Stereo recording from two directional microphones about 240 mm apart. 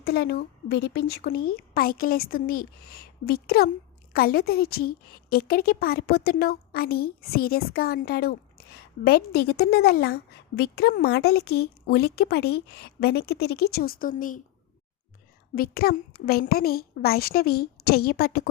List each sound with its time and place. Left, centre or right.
0.0 s a woman's voice: left
15.5 s a woman's voice: left